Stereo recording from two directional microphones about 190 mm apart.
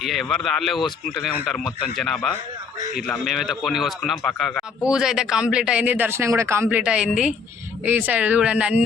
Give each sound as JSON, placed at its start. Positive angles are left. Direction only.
{"t": 0.0, "sound": "a man's voice", "side_deg": 0}